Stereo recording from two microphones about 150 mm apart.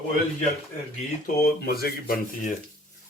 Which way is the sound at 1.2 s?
85° left.